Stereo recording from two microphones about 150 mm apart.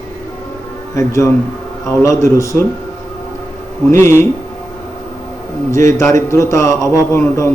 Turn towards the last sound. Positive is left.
turn(degrees=20)  # may be behind; listen again after turning